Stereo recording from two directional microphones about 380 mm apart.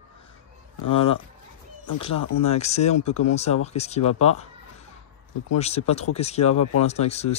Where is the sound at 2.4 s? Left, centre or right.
Centre.